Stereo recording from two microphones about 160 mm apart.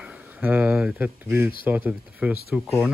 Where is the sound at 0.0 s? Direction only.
5° right (ahead or behind).